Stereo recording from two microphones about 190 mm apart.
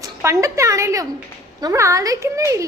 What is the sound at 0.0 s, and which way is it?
A woman's voice, 15° right (ahead or behind).